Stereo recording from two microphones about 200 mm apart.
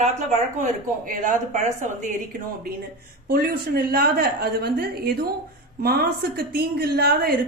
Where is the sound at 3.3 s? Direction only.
50° right (ahead or behind).